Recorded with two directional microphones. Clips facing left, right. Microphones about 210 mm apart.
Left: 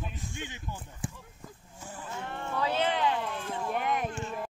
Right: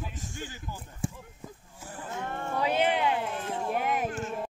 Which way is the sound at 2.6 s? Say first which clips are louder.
Right 2 dB; 15° right (ahead or behind).